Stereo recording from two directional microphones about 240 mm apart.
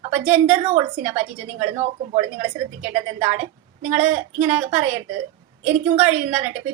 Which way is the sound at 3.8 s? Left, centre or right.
Right.